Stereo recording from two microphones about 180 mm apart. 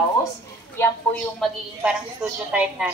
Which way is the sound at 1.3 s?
Centre (ahead or behind).